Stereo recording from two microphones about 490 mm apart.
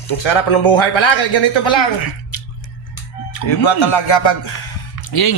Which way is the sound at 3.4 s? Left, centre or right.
Left.